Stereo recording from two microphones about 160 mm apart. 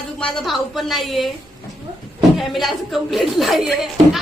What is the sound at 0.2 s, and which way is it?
Speech, 5° left (ahead or behind).